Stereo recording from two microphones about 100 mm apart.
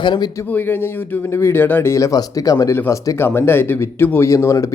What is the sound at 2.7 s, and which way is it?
Speech, 20° left (ahead or behind).